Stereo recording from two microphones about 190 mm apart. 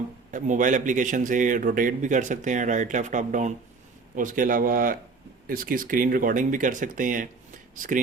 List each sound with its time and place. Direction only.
0.3 s a man's voice: 40° right (ahead or behind)